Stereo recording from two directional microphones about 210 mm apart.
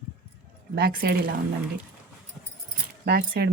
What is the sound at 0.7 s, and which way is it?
Speech, 45° right (ahead or behind).